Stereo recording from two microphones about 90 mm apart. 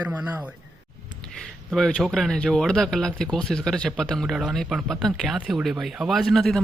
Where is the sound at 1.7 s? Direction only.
5° left (ahead or behind).